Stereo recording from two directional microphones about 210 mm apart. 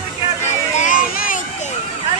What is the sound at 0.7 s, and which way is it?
Vehicle, 40° left (ahead or behind).